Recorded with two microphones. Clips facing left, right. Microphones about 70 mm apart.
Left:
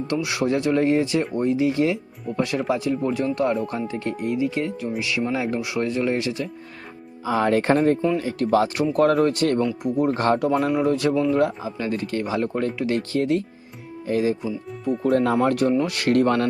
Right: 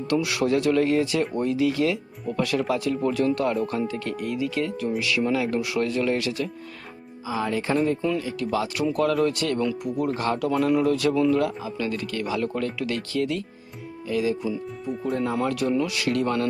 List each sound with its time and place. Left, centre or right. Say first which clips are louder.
0.1 s speech: right 1 dB; left
7.3 s speech: left 6 dB; left
9.8 s speech: left 5 dB; left
10.2 s speech: left 5 dB; left
10.7 s speech: left 1 dB; left
14.4 s speech: left 2 dB; centre
15.0 s speech: left 7 dB; left
15.4 s speech: left 4 dB; left